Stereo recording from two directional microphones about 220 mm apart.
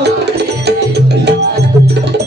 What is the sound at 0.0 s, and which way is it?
Music, 50° right (ahead or behind).